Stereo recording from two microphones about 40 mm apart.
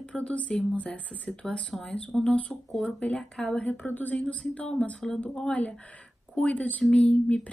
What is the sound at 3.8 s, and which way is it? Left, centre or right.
Speech, left.